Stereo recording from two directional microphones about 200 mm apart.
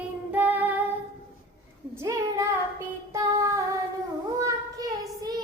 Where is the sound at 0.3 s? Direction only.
10° right (ahead or behind).